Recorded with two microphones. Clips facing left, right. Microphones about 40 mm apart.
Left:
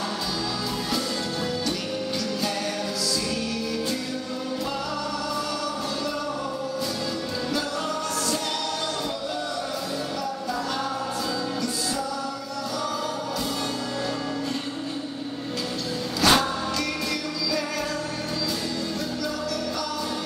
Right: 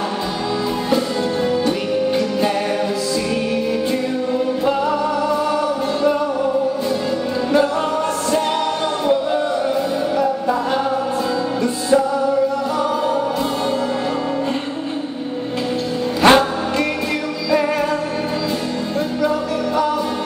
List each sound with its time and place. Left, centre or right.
16.2 s music: right